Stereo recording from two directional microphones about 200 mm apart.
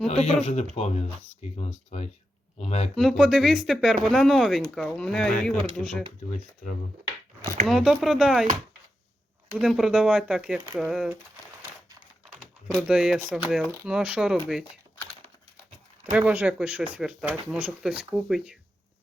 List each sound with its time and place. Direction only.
0.1 s speech: 30° left (ahead or behind)
2.9 s speech: centre (ahead or behind)
7.7 s speech: 5° right (ahead or behind)
9.5 s speech: 5° right (ahead or behind)
12.7 s speech: 5° right (ahead or behind)
16.1 s speech: 10° right (ahead or behind)